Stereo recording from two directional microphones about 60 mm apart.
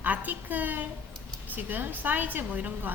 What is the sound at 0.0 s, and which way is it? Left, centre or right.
A woman's voice, right.